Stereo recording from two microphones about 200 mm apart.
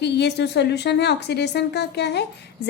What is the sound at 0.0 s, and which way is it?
A woman's voice, 55° left (ahead or behind).